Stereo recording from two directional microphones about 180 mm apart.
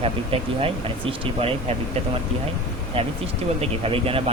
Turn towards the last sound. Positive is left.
turn(degrees=-30)  # may be behind; listen again after turning